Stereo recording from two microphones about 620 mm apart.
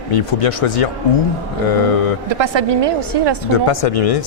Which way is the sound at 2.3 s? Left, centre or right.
Right.